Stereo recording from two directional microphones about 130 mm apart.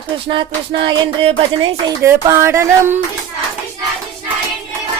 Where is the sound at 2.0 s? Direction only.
20° right (ahead or behind).